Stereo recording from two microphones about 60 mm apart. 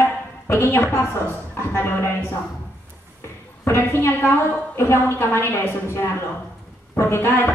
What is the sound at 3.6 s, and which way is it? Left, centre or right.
A woman's voice, left.